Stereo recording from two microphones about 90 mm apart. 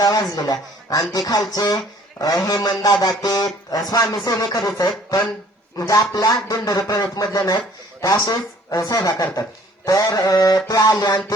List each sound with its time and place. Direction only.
0.0 s speech: 45° left (ahead or behind)
5.7 s a man's voice: 40° left (ahead or behind)